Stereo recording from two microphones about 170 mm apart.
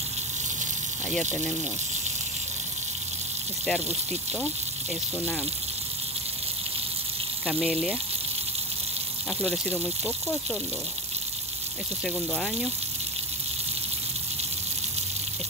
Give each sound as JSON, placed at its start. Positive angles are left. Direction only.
{"t": 7.4, "sound": "speech", "side_deg": 0}
{"t": 10.0, "sound": "speech", "side_deg": 0}
{"t": 12.0, "sound": "speech", "side_deg": 5}